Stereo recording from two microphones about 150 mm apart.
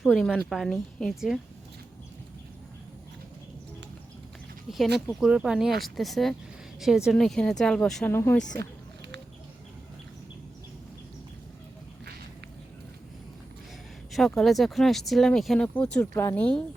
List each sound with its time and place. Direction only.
0.0 s speech: centre (ahead or behind)
4.9 s speech: 5° right (ahead or behind); by 8.4 s 15° left (ahead or behind)
14.1 s speech: centre (ahead or behind)